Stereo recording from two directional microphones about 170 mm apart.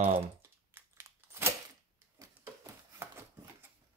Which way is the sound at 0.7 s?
15° right (ahead or behind).